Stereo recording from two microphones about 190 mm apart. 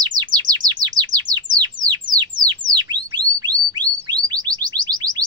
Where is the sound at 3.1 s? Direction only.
20° right (ahead or behind).